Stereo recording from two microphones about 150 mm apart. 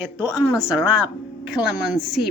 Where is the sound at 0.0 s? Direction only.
10° right (ahead or behind).